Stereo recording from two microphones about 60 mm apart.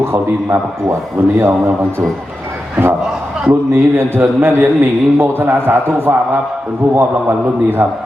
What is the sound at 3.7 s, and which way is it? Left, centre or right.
A man's voice, right.